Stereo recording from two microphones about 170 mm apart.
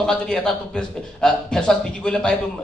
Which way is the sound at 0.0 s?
5° left (ahead or behind).